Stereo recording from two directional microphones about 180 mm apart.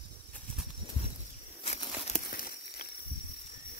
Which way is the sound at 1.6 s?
35° left (ahead or behind).